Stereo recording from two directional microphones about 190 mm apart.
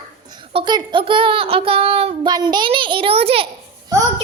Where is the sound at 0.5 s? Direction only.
25° right (ahead or behind).